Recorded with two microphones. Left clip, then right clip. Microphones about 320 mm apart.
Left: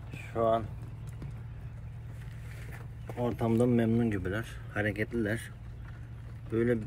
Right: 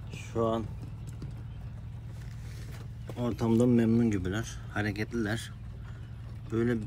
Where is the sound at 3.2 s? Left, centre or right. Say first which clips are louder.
Right 1 dB; centre.